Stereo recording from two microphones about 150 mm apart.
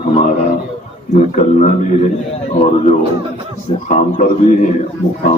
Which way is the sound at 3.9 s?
55° left (ahead or behind).